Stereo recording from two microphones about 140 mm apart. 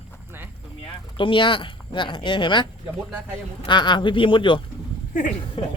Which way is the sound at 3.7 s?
35° left (ahead or behind).